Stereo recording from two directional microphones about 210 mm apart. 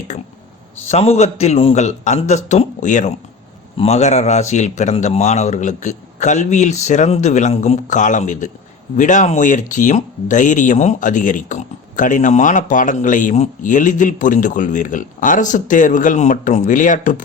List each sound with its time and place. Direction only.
0.9 s speech: 30° left (ahead or behind)